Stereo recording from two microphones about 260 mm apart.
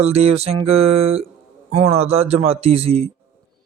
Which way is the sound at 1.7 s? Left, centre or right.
Right.